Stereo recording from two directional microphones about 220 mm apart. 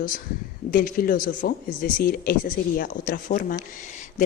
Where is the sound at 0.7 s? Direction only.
40° left (ahead or behind).